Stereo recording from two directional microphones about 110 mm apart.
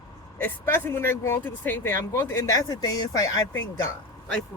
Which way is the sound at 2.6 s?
35° left (ahead or behind).